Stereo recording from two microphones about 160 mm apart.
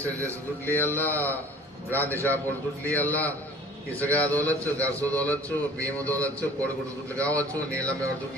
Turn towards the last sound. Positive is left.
turn(degrees=10)  # may be behind; listen again after turning